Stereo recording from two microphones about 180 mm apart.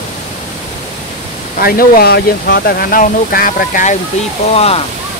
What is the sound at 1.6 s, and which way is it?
Speech, 55° left (ahead or behind).